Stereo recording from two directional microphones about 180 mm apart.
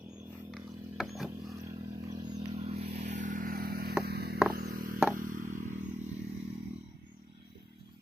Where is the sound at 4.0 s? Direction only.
65° right (ahead or behind).